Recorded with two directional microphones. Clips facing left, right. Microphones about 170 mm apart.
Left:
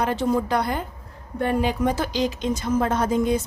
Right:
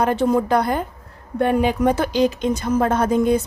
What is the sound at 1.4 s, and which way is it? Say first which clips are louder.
A woman's voice: right 4 dB; 65° right (ahead or behind).